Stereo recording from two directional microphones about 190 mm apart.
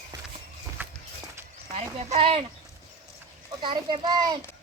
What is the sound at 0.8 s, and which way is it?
Walk, 10° right (ahead or behind).